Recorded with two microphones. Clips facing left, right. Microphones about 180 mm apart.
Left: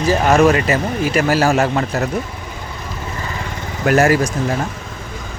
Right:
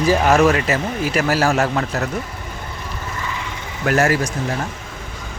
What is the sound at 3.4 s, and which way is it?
Vehicle, 45° left (ahead or behind).